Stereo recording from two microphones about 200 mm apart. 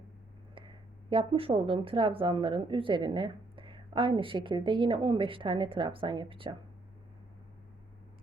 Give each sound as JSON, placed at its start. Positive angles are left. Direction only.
{"t": 0.5, "sound": "speech", "side_deg": -25}